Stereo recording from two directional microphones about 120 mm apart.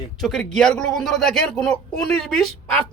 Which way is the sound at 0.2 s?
5° left (ahead or behind).